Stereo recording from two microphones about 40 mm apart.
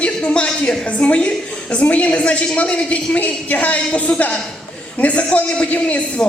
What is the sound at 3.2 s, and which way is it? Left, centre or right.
A woman's voice, left.